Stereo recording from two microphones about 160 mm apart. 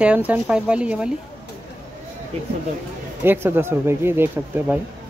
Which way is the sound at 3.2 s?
15° right (ahead or behind).